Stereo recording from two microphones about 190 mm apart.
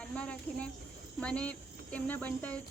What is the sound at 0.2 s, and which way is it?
Speech, 5° left (ahead or behind).